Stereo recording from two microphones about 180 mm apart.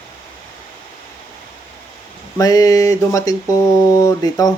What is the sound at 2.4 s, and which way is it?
Speech, 20° left (ahead or behind).